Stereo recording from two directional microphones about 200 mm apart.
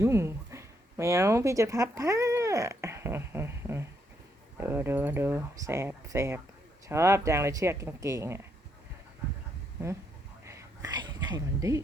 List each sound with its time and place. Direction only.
0.0 s speech: 15° right (ahead or behind)
10.4 s whispering: 15° right (ahead or behind)